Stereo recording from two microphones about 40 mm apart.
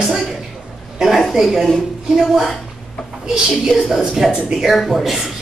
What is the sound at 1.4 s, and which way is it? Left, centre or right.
Speech, centre.